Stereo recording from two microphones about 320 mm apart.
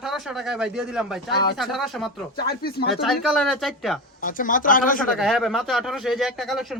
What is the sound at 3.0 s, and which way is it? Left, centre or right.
Speech, centre.